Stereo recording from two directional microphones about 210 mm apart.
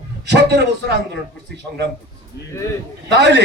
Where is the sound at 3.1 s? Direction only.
55° right (ahead or behind).